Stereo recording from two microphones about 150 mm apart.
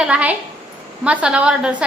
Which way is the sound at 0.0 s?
5° right (ahead or behind).